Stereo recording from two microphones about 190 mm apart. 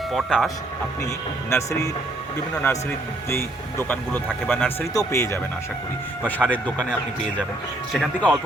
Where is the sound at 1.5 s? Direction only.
15° left (ahead or behind).